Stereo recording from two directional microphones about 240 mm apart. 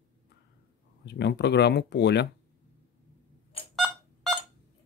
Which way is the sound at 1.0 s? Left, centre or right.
Left.